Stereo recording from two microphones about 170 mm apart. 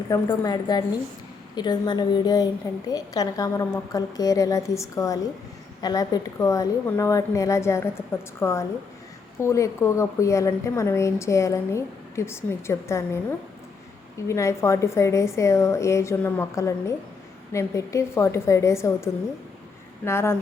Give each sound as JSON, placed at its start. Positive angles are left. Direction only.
{"t": 0.1, "sound": "a woman's voice", "side_deg": 25}
{"t": 14.3, "sound": "a woman's voice", "side_deg": 15}